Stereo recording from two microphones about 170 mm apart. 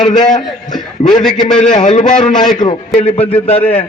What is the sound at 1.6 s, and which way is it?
A man's voice, 45° left (ahead or behind).